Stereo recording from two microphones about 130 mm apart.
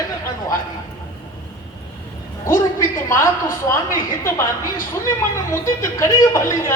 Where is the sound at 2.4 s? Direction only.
20° left (ahead or behind).